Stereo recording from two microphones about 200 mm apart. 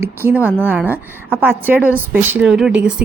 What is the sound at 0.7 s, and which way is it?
A woman's voice, 10° right (ahead or behind).